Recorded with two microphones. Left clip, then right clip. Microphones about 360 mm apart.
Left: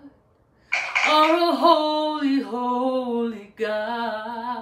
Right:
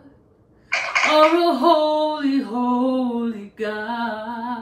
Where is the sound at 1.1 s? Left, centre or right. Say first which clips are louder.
Right 3 dB; centre.